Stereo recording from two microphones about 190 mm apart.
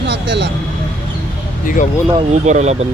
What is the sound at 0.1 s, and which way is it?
Vehicle, 65° right (ahead or behind).